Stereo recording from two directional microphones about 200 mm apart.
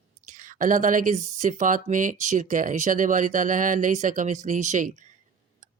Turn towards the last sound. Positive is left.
turn(degrees=-40)  # may be behind; listen again after turning